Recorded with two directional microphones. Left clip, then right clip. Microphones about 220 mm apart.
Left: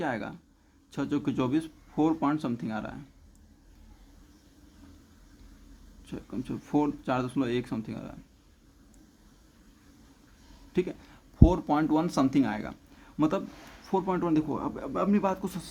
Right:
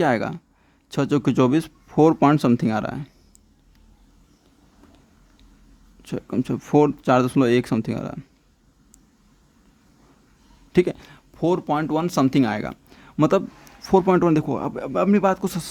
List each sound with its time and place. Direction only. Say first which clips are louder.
0.0 s speech: right 12 dB; 45° right (ahead or behind)
6.1 s speech: right 11 dB; 45° right (ahead or behind)
10.7 s a man's voice: right 11 dB; 45° right (ahead or behind)